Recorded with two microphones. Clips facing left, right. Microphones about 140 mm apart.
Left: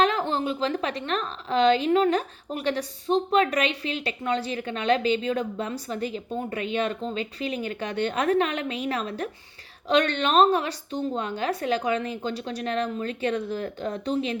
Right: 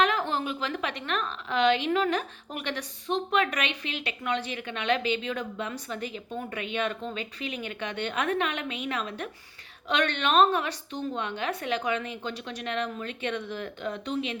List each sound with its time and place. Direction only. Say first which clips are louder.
0.0 s a woman's voice: left 3 dB; 30° left (ahead or behind)